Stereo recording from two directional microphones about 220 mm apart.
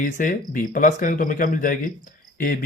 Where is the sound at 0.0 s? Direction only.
40° left (ahead or behind).